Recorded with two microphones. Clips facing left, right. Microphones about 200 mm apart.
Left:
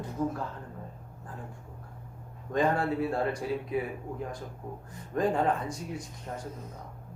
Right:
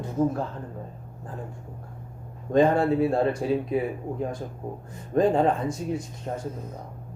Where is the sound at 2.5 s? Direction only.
25° right (ahead or behind).